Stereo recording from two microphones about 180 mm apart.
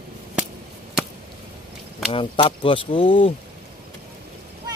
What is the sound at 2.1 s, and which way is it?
Speech, 30° left (ahead or behind).